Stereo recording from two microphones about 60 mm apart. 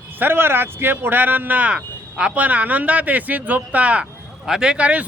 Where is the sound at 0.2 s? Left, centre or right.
Right.